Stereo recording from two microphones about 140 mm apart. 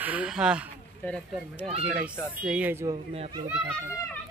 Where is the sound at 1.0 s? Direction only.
15° left (ahead or behind).